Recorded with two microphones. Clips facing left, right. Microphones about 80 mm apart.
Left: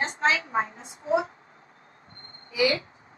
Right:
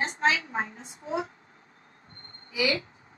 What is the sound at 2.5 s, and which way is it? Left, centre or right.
Speech, left.